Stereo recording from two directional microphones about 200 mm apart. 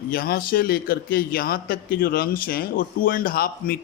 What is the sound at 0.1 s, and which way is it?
A man's voice, 45° left (ahead or behind).